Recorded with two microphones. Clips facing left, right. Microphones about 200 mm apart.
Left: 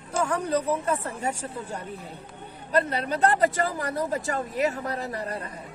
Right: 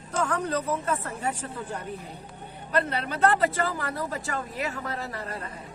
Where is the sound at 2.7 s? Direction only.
40° left (ahead or behind).